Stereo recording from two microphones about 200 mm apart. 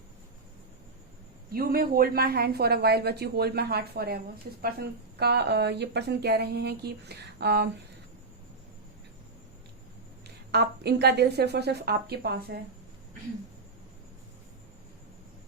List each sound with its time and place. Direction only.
1.5 s a woman's voice: 50° right (ahead or behind)
10.2 s a woman's voice: 55° right (ahead or behind)